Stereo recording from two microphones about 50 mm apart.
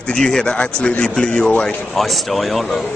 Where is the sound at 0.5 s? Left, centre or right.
Left.